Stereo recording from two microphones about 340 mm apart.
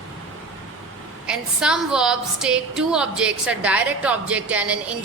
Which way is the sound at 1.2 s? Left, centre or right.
Centre.